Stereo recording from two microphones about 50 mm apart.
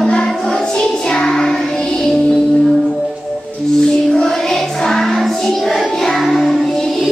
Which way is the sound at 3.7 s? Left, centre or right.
Centre.